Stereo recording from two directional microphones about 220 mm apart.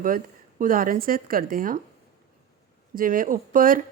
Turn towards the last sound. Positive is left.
turn(degrees=-40)  # may be behind; listen again after turning